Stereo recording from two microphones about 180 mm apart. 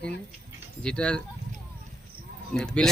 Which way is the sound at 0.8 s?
5° left (ahead or behind).